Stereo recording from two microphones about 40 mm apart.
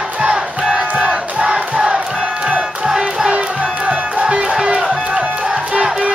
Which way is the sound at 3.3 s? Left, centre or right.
Right.